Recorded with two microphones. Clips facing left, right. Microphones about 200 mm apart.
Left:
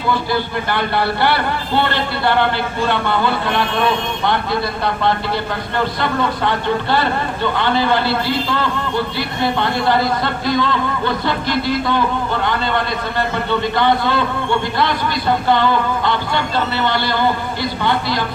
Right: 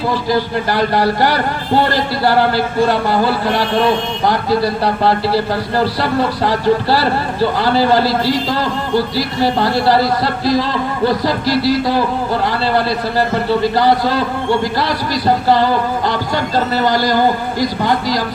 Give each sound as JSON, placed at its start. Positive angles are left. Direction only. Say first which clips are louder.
{"t": 0.1, "sound": "speech", "louder": "even", "side_deg": -35}